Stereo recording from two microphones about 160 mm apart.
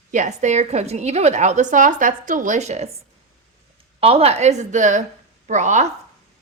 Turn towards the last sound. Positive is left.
turn(degrees=-50)  # may be behind; listen again after turning